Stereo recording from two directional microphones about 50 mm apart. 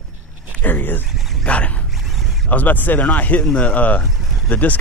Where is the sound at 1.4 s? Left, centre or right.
Left.